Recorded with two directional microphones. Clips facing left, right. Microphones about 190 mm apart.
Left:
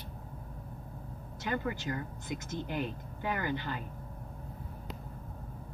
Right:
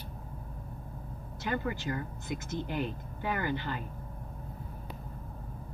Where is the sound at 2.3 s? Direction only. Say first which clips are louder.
Right 2 dB; 50° left (ahead or behind).